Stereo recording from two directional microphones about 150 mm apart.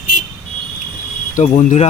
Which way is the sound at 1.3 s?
50° left (ahead or behind).